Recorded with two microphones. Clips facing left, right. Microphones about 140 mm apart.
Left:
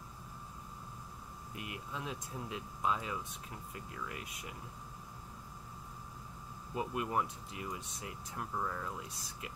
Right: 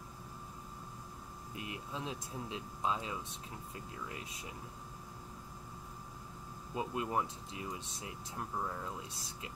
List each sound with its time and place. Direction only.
1.6 s speech: 25° right (ahead or behind)
6.7 s speech: 25° right (ahead or behind)